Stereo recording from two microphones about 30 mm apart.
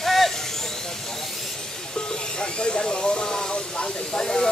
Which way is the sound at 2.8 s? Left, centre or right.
Left.